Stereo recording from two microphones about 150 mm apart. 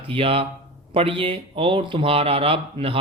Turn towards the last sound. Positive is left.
turn(degrees=-40)  # may be behind; listen again after turning